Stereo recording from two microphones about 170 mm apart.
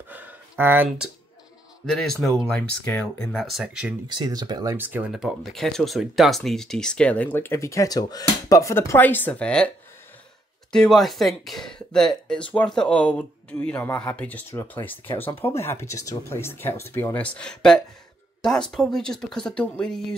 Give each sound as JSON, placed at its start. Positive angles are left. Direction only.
{"t": 0.1, "sound": "a sound", "side_deg": -10}
{"t": 1.9, "sound": "speech", "side_deg": 5}
{"t": 4.1, "sound": "speech", "side_deg": -25}
{"t": 4.7, "sound": "speech", "side_deg": -10}
{"t": 10.7, "sound": "speech", "side_deg": 0}